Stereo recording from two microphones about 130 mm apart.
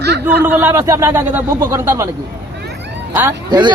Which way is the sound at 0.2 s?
15° right (ahead or behind).